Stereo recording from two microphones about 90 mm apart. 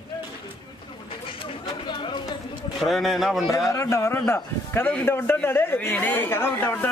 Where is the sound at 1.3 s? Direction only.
65° left (ahead or behind).